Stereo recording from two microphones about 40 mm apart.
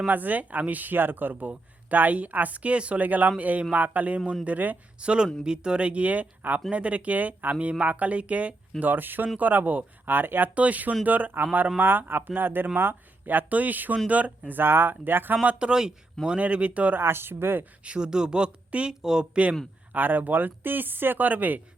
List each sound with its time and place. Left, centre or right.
0.1 s speech: right
4.9 s speech: right
8.8 s speech: right
10.1 s speech: right
10.5 s speech: right
11.8 s speech: right
14.6 s speech: right
15.4 s speech: right
17.0 s speech: right
17.8 s speech: right
19.9 s speech: right